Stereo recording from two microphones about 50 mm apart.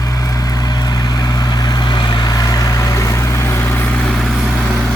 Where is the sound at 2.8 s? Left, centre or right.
Left.